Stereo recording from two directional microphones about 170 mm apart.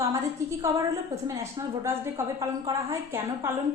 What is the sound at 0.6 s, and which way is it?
Speech, 20° right (ahead or behind).